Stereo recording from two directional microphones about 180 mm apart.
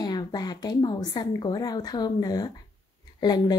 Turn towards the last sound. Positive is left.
turn(degrees=25)  # may be behind; listen again after turning